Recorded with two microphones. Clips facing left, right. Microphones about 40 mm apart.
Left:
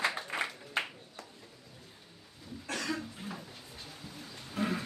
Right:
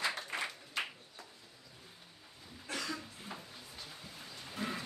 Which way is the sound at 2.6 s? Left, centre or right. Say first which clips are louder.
Left 3 dB; left.